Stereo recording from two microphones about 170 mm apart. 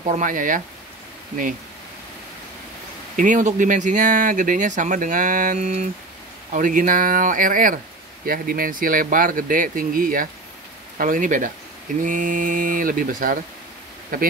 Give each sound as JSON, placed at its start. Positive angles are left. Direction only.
{"t": 0.0, "sound": "speech", "side_deg": -50}
{"t": 3.2, "sound": "speech", "side_deg": -50}